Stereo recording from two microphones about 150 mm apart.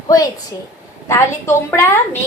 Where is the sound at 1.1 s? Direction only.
15° left (ahead or behind).